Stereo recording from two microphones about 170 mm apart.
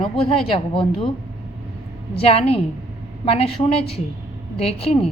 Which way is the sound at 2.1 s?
35° left (ahead or behind).